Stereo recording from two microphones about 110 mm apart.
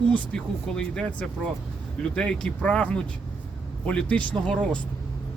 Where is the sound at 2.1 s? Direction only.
10° left (ahead or behind).